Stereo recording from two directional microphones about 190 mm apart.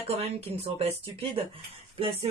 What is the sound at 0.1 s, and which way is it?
Speech, 35° right (ahead or behind).